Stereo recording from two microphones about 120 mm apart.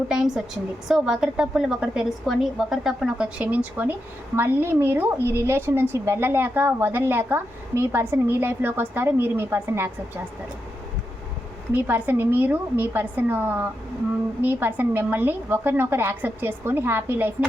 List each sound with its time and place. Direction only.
0.1 s a woman's voice: 5° right (ahead or behind); by 9.9 s 20° right (ahead or behind)
11.7 s a woman's voice: 15° right (ahead or behind)